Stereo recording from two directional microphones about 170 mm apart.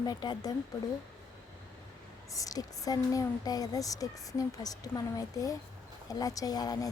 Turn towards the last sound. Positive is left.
turn(degrees=20)  # may be behind; listen again after turning